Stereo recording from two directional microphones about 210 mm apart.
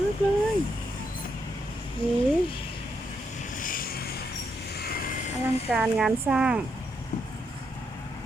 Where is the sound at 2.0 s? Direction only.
25° left (ahead or behind).